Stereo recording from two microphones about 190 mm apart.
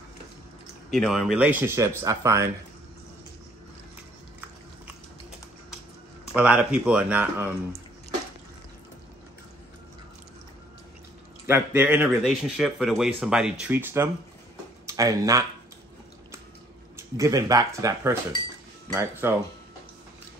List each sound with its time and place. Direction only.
0.9 s speech: centre (ahead or behind)
6.3 s speech: 5° right (ahead or behind)
11.4 s speech: 10° right (ahead or behind)
16.9 s speech: 20° right (ahead or behind)